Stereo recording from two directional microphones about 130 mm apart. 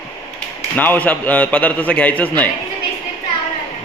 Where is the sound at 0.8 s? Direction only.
15° left (ahead or behind).